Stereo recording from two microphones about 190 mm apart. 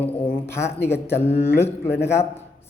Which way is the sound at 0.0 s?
10° left (ahead or behind).